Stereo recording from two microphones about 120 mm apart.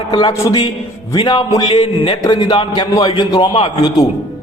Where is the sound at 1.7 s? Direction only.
55° left (ahead or behind).